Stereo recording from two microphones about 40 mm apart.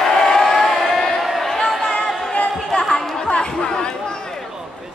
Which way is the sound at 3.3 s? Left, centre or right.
Left.